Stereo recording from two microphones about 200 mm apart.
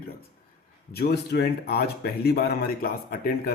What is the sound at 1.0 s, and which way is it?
Speech, 50° left (ahead or behind).